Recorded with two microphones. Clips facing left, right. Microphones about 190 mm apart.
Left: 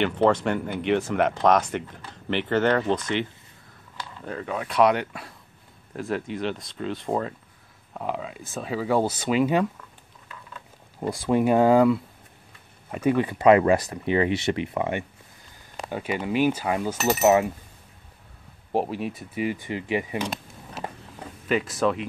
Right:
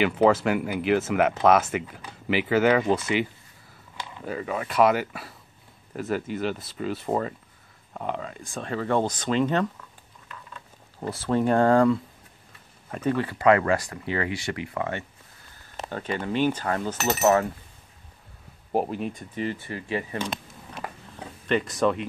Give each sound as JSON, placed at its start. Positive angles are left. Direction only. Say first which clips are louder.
{"t": 0.0, "sound": "speech", "louder": "right 1 dB", "side_deg": -5}
{"t": 11.0, "sound": "speech", "louder": "left 2 dB", "side_deg": 15}
{"t": 18.7, "sound": "speech", "louder": "even", "side_deg": 0}
{"t": 21.5, "sound": "speech", "louder": "even", "side_deg": 0}